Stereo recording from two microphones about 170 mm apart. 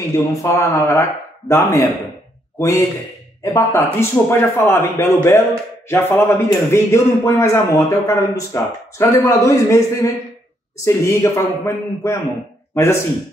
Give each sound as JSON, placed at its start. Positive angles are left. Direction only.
{"t": 0.4, "sound": "a man's voice", "side_deg": 20}